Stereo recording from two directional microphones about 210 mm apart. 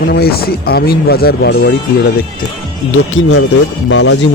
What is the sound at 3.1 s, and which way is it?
Speech, 65° left (ahead or behind).